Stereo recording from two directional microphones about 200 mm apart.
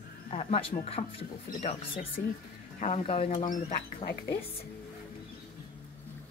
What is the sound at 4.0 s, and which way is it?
Speech, 55° left (ahead or behind).